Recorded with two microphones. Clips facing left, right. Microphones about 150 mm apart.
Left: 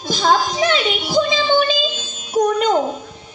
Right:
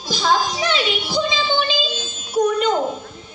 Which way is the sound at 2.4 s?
45° left (ahead or behind).